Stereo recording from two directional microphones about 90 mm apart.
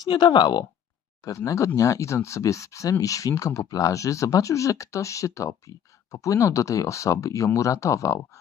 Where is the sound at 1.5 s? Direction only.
35° left (ahead or behind).